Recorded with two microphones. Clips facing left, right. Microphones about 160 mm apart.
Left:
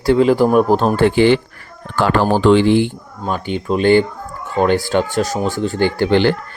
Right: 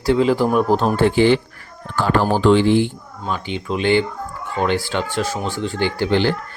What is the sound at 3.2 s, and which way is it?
Speech, 50° left (ahead or behind).